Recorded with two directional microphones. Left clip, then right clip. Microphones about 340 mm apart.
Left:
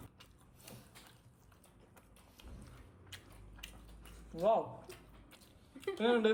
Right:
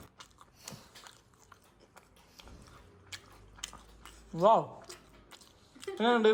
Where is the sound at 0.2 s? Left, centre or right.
Right.